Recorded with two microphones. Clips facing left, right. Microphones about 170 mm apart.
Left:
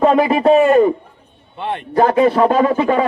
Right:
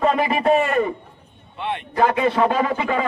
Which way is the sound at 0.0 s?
35° left (ahead or behind).